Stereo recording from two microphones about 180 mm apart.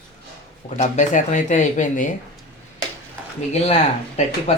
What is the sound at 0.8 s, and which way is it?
Speech, 45° left (ahead or behind).